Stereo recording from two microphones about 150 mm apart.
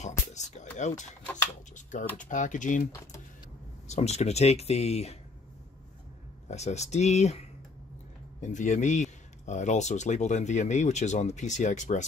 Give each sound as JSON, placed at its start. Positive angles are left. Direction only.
{"t": 0.0, "sound": "speech", "side_deg": 50}
{"t": 2.1, "sound": "speech", "side_deg": 55}
{"t": 2.9, "sound": "speech", "side_deg": 20}
{"t": 3.8, "sound": "speech", "side_deg": 50}
{"t": 6.5, "sound": "speech", "side_deg": 50}